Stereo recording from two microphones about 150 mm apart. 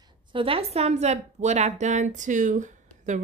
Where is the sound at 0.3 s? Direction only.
35° right (ahead or behind).